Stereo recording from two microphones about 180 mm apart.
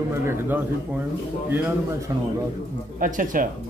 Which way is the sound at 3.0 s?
45° right (ahead or behind).